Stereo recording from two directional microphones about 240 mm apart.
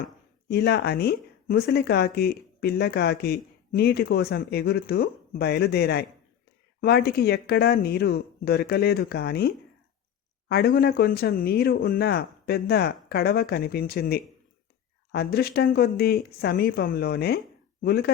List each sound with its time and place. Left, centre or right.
0.0 s speech: left
10.5 s speech: left